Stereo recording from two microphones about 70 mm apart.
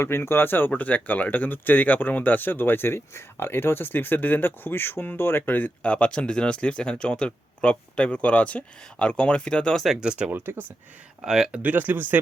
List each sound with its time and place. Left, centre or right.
0.0 s speech: left; by 9.7 s centre
9.7 s speech: centre
10.0 s speech: centre
10.3 s speech: right
11.2 s speech: centre
11.5 s speech: right